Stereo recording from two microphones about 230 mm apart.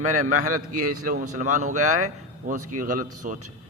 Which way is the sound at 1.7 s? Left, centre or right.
Right.